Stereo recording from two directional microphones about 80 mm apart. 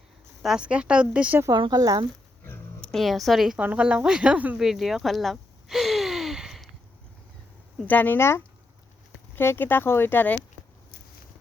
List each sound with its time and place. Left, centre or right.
0.4 s speech: centre
1.7 s speech: right
2.9 s a woman's voice: centre
3.6 s speech: centre
4.5 s a sound: centre
7.9 s speech: left